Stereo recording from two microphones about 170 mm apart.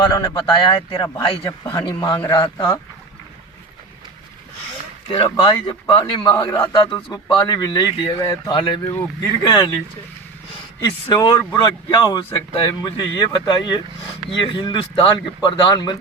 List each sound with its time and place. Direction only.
0.0 s a man's voice: 25° left (ahead or behind)
1.5 s a man's voice: 15° left (ahead or behind)
5.1 s a man's voice: 30° left (ahead or behind)